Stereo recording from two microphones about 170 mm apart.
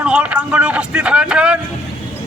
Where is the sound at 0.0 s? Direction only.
5° right (ahead or behind).